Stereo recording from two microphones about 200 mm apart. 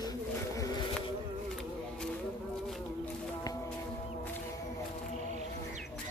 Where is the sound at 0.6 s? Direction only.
20° left (ahead or behind).